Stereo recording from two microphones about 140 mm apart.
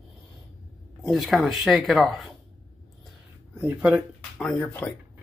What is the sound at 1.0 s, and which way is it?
Speech, centre (ahead or behind).